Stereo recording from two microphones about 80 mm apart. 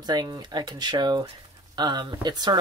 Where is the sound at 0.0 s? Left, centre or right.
Right.